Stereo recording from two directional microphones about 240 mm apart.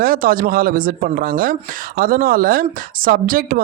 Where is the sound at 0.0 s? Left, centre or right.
Right.